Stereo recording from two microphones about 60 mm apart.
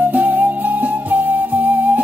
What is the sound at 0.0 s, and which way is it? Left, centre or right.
Music, right.